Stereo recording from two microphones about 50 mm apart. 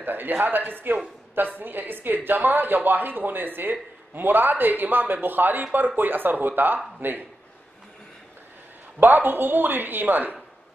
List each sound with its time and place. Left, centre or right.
0.0 s speech: right
9.0 s speech: right